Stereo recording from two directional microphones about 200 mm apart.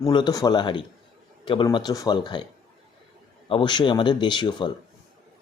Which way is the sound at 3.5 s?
25° left (ahead or behind).